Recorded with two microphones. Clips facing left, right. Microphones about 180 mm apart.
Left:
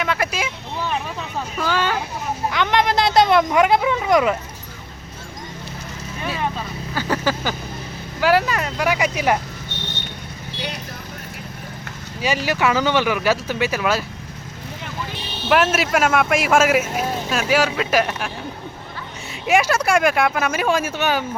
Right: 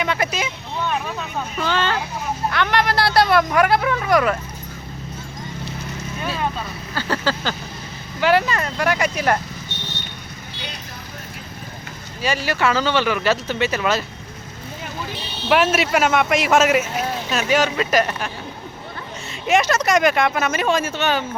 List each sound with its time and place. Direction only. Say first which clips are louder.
0.0 s vehicle: even; centre (ahead or behind)
1.5 s speech: even; 5° left (ahead or behind)
2.5 s speech: left 2 dB; 15° left (ahead or behind)
6.9 s speech: left 1 dB; 15° left (ahead or behind)
12.2 s speech: left 1 dB; 15° left (ahead or behind)
15.4 s speech: even; centre (ahead or behind)
19.5 s speech: even; 10° left (ahead or behind)